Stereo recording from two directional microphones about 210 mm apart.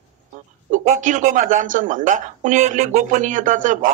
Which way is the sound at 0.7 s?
35° right (ahead or behind).